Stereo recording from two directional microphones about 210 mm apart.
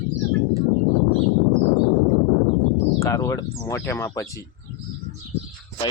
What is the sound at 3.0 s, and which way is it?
Speech, 15° left (ahead or behind).